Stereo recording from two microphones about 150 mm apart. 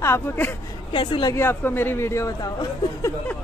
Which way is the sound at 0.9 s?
35° left (ahead or behind).